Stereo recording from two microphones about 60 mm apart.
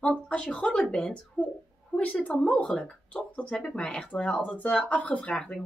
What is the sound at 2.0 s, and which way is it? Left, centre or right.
A woman's voice, left.